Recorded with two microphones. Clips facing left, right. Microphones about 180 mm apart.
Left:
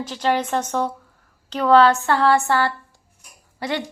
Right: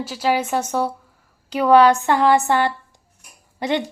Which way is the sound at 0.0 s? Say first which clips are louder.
Right 1 dB; 5° right (ahead or behind).